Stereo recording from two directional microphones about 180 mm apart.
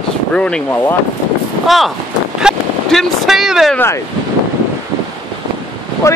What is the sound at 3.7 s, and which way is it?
Speech, 15° left (ahead or behind).